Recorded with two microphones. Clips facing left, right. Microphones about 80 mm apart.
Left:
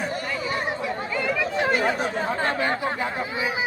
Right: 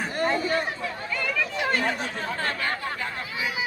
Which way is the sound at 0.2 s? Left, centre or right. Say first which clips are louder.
Right 4 dB; right.